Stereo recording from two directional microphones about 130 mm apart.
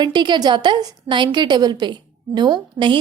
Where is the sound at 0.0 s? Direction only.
35° right (ahead or behind).